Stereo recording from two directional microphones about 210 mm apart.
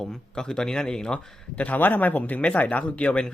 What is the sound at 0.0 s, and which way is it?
Speech, 5° left (ahead or behind).